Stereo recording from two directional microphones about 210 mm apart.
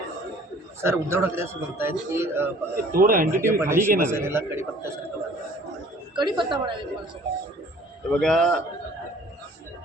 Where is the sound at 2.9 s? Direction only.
45° right (ahead or behind).